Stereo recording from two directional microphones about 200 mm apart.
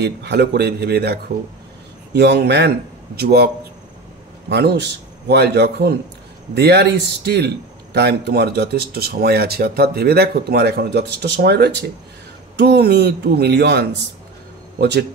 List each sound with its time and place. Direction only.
0.0 s a man's voice: 55° right (ahead or behind)
4.5 s a man's voice: 55° right (ahead or behind)